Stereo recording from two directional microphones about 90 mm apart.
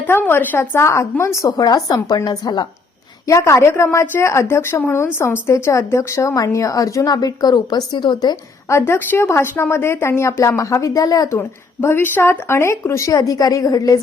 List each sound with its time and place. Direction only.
0.1 s a woman's voice: 25° left (ahead or behind)
1.5 s a woman's voice: 45° left (ahead or behind)
3.2 s a woman's voice: 30° left (ahead or behind); by 8.4 s 50° left (ahead or behind)
8.7 s speech: 25° left (ahead or behind); by 14.0 s 40° left (ahead or behind)